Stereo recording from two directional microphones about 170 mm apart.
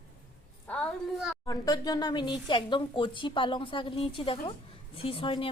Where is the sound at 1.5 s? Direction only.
20° left (ahead or behind).